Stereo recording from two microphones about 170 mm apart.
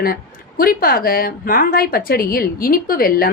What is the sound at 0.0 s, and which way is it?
Speech, 60° left (ahead or behind).